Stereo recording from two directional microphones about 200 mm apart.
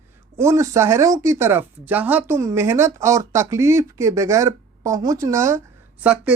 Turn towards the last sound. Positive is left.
turn(degrees=-5)  # may be behind; listen again after turning